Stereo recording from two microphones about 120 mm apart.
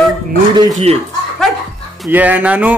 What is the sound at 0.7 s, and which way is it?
Speech, 60° right (ahead or behind).